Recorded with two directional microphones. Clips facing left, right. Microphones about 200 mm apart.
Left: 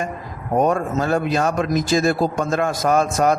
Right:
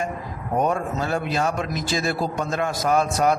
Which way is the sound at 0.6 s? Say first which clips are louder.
Left 5 dB; 45° left (ahead or behind).